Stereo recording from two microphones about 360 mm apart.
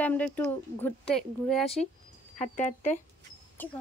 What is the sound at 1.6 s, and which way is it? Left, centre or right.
Speech, centre.